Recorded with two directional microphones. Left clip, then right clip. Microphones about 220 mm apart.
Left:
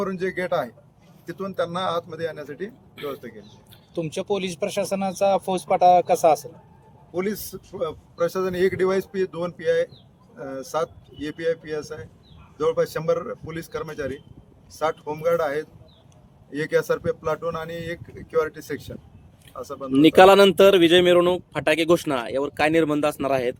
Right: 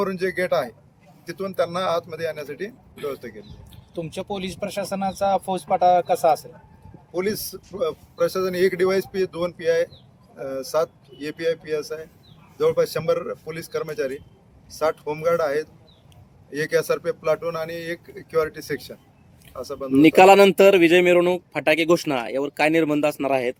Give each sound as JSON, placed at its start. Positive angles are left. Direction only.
{"t": 0.0, "sound": "speech", "side_deg": 5}
{"t": 3.9, "sound": "speech", "side_deg": 40}
{"t": 7.1, "sound": "speech", "side_deg": 10}